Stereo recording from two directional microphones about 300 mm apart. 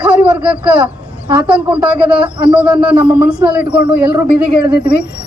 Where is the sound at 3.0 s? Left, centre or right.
Centre.